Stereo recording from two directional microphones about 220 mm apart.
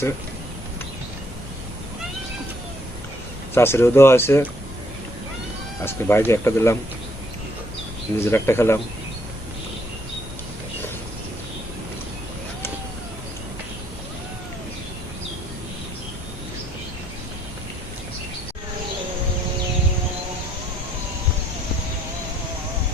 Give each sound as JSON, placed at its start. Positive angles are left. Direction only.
{"t": 3.5, "sound": "speech", "side_deg": 10}
{"t": 5.8, "sound": "speech", "side_deg": 10}
{"t": 8.2, "sound": "speech", "side_deg": 10}